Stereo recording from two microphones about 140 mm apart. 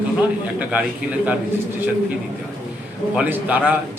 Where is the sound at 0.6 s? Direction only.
10° right (ahead or behind).